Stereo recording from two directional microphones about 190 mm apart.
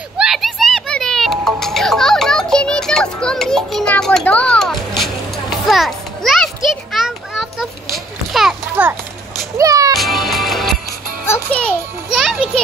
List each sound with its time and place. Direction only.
0.2 s music: centre (ahead or behind)
5.7 s children playing: centre (ahead or behind)
9.6 s music: 15° right (ahead or behind)
9.9 s music: centre (ahead or behind)